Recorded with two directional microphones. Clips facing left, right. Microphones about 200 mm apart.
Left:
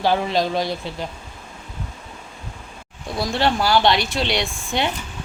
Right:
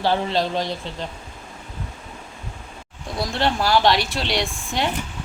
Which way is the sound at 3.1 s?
Centre (ahead or behind).